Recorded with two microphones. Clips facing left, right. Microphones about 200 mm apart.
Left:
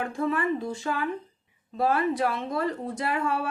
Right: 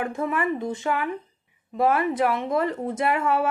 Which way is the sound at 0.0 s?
20° right (ahead or behind).